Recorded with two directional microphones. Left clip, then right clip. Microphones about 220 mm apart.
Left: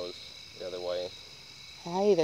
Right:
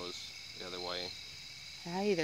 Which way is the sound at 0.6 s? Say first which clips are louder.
Left 7 dB; 25° right (ahead or behind).